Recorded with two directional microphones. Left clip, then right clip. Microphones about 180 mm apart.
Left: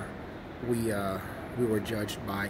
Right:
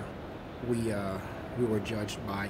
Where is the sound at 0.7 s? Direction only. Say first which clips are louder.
Left 2 dB; 10° right (ahead or behind).